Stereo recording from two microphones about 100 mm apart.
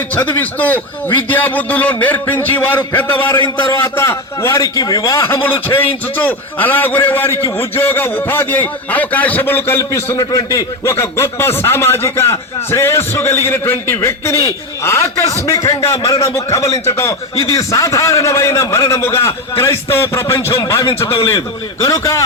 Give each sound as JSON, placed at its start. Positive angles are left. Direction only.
{"t": 0.1, "sound": "a man's voice", "side_deg": 15}